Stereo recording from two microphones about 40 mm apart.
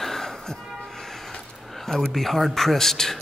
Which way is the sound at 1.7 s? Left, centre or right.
Centre.